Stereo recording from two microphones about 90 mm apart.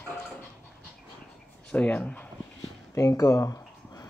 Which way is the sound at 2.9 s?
35° left (ahead or behind).